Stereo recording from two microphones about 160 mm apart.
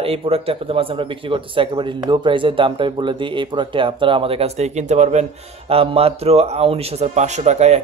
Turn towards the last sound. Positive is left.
turn(degrees=-45)  # may be behind; listen again after turning